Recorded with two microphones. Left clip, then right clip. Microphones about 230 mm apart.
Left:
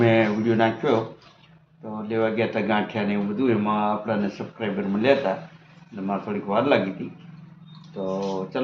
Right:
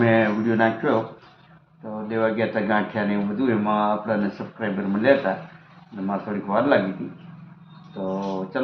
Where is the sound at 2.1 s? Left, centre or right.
Centre.